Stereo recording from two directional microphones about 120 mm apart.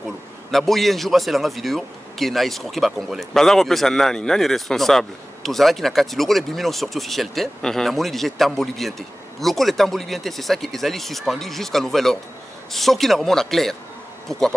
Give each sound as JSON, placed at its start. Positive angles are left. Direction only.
{"t": 0.5, "sound": "speech", "side_deg": 0}